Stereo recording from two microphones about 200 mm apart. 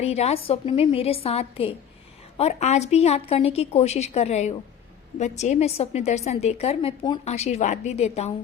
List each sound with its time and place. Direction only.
0.0 s a woman's voice: 30° left (ahead or behind)